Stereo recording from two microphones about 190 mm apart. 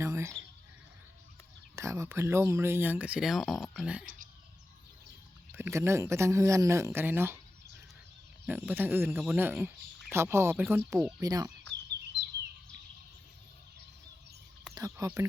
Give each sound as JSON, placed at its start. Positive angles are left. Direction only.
{"t": 0.0, "sound": "a sound", "side_deg": -15}
{"t": 1.7, "sound": "speech", "side_deg": -15}
{"t": 5.5, "sound": "speech", "side_deg": -15}
{"t": 8.4, "sound": "speech", "side_deg": -10}
{"t": 11.7, "sound": "chicken", "side_deg": -65}
{"t": 14.8, "sound": "speech", "side_deg": -15}